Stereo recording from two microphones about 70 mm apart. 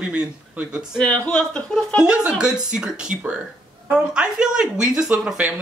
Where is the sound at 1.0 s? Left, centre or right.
Centre.